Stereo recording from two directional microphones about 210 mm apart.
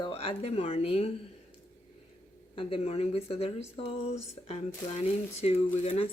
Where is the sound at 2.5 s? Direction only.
25° left (ahead or behind).